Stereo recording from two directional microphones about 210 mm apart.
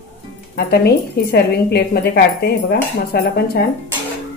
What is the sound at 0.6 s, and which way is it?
Speech, 50° left (ahead or behind).